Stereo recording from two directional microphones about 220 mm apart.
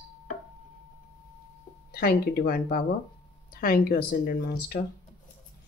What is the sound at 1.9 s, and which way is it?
Speech, 45° left (ahead or behind).